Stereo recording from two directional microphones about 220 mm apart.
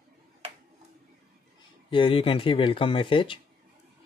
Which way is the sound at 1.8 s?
25° left (ahead or behind).